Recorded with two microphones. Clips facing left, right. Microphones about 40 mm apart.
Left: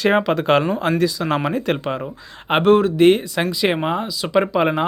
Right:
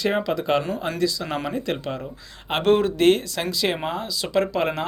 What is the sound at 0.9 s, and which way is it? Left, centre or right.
Speech, left.